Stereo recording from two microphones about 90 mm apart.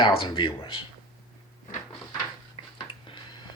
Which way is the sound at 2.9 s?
70° left (ahead or behind).